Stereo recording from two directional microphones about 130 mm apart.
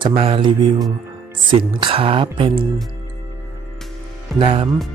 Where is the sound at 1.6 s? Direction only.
40° right (ahead or behind).